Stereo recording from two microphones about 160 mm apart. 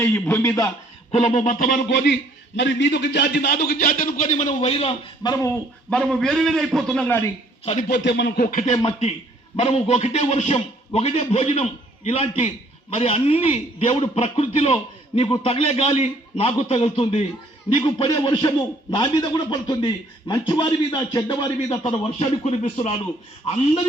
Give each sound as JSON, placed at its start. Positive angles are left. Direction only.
{"t": 0.0, "sound": "a man's voice", "side_deg": 15}
{"t": 1.1, "sound": "speech", "side_deg": 45}
{"t": 2.8, "sound": "a man's voice", "side_deg": 90}
{"t": 5.2, "sound": "a man's voice", "side_deg": 25}
{"t": 5.9, "sound": "a man's voice", "side_deg": 5}
{"t": 7.9, "sound": "a sound", "side_deg": 90}
{"t": 9.6, "sound": "a man's voice", "side_deg": 40}
{"t": 22.2, "sound": "a man's voice", "side_deg": 40}